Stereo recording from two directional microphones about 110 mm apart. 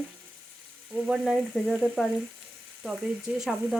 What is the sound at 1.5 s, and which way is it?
Frying, centre (ahead or behind).